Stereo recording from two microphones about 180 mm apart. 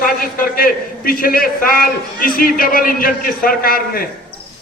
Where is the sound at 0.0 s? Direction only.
50° left (ahead or behind).